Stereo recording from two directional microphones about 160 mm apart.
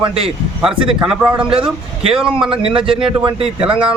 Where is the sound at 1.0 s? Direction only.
10° right (ahead or behind).